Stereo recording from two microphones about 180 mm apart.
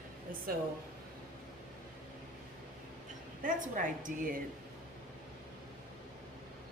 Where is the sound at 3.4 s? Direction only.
45° right (ahead or behind).